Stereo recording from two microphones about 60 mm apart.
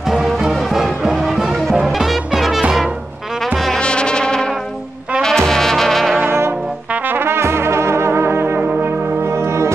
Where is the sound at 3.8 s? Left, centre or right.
Centre.